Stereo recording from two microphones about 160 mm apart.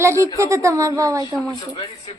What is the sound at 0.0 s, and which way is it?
A woman's voice, 15° right (ahead or behind).